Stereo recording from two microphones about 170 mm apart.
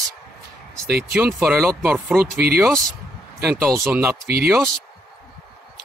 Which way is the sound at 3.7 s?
15° right (ahead or behind).